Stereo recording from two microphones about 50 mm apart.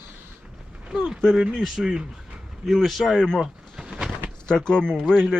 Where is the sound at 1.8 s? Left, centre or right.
Centre.